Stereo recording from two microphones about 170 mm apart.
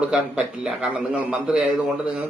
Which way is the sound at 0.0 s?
5° right (ahead or behind).